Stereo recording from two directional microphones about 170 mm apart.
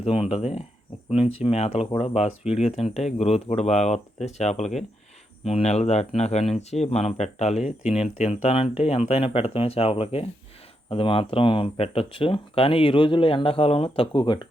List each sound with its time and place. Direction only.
0.0 s speech: 35° left (ahead or behind)